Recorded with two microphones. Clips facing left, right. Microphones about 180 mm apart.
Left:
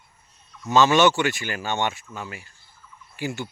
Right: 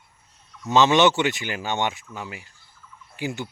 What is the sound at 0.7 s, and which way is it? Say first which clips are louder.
A man's voice: even; 20° right (ahead or behind).